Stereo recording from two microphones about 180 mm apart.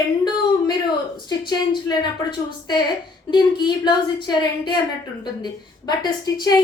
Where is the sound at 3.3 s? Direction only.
25° left (ahead or behind).